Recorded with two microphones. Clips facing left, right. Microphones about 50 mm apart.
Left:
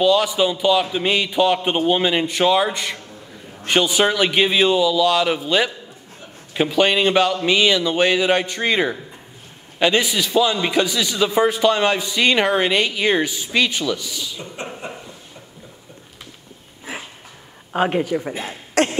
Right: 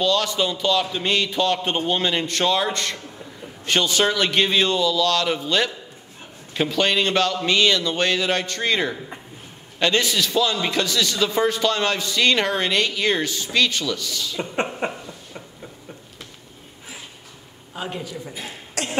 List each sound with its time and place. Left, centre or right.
0.0 s a man's voice: centre
14.8 s a sound: right
17.7 s a woman's voice: left